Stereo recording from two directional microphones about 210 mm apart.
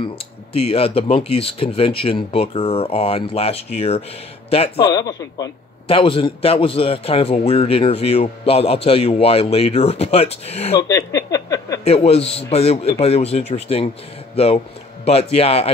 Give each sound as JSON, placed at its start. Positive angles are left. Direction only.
{"t": 0.0, "sound": "a man's voice", "side_deg": 25}
{"t": 10.8, "sound": "a sound", "side_deg": 15}
{"t": 11.8, "sound": "a man's voice", "side_deg": 30}